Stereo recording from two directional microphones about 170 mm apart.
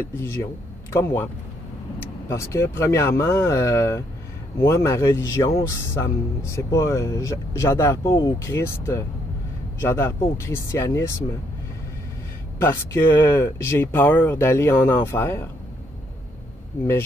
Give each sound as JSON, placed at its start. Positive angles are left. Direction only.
{"t": 0.2, "sound": "speech", "side_deg": 15}
{"t": 12.5, "sound": "speech", "side_deg": 15}